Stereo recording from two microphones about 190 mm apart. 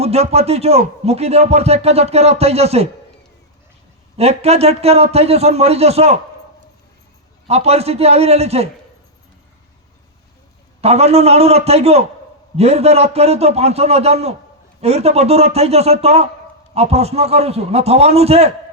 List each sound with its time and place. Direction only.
0.0 s speech: 35° right (ahead or behind)
4.2 s speech: 35° right (ahead or behind)
7.4 s speech: 35° right (ahead or behind)
10.8 s speech: 35° right (ahead or behind)